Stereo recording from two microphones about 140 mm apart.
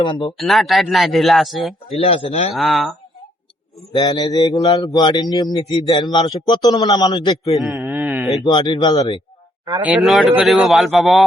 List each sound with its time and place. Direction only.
0.0 s speech: 35° left (ahead or behind)
0.3 s speech: centre (ahead or behind)
2.0 s a man's voice: 45° left (ahead or behind)
2.6 s speech: centre (ahead or behind)
3.9 s a man's voice: 30° left (ahead or behind)
7.5 s a sound: centre (ahead or behind)
8.4 s speech: 30° left (ahead or behind)
10.0 s speech: centre (ahead or behind)